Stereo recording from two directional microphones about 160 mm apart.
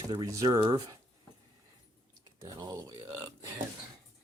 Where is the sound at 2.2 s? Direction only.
25° right (ahead or behind).